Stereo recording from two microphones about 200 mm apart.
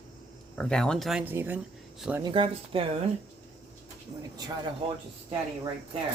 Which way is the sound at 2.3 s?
25° right (ahead or behind).